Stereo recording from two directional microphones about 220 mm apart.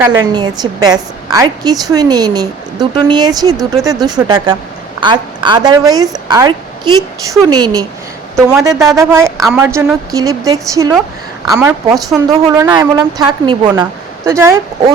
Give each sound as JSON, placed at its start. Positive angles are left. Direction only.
{"t": 0.0, "sound": "a woman's voice", "side_deg": -15}
{"t": 8.7, "sound": "speech", "side_deg": 0}
{"t": 9.0, "sound": "a woman's voice", "side_deg": -15}
{"t": 11.9, "sound": "speech", "side_deg": 0}
{"t": 12.5, "sound": "a woman's voice", "side_deg": -15}